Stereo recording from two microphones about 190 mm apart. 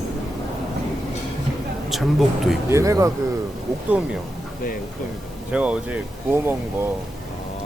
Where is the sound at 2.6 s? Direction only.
15° right (ahead or behind).